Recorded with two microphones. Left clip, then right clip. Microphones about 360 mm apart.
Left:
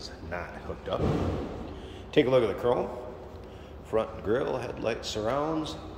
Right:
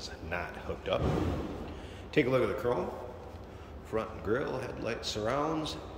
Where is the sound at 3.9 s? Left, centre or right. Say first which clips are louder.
Left 5 dB; centre.